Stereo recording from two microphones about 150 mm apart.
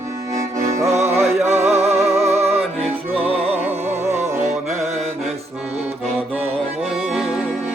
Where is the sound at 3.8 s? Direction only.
15° right (ahead or behind).